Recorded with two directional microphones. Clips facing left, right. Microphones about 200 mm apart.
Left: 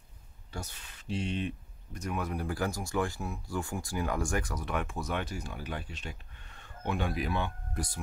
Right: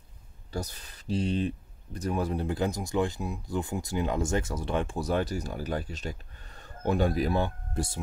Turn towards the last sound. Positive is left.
turn(degrees=-25)  # may be behind; listen again after turning